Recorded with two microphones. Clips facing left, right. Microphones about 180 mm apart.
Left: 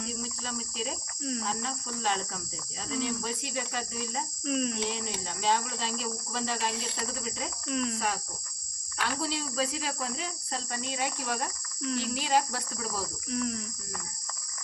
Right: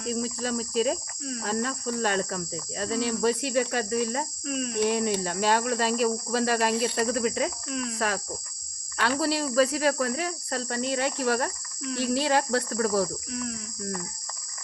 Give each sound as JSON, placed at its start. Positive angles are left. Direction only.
{"t": 0.1, "sound": "speech", "side_deg": -70}
{"t": 4.4, "sound": "speech", "side_deg": 0}
{"t": 4.8, "sound": "speech", "side_deg": -65}
{"t": 7.7, "sound": "speech", "side_deg": 0}
{"t": 7.9, "sound": "speech", "side_deg": -75}
{"t": 13.3, "sound": "speech", "side_deg": 0}